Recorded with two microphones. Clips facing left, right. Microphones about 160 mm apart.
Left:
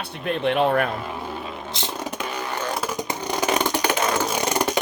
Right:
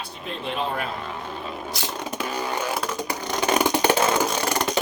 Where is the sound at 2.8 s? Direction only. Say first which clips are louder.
Left 1 dB; 10° left (ahead or behind).